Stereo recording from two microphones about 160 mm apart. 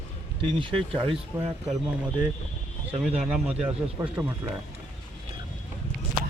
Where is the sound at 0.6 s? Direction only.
35° right (ahead or behind).